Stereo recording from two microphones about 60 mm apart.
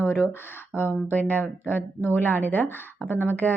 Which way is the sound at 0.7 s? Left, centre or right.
Left.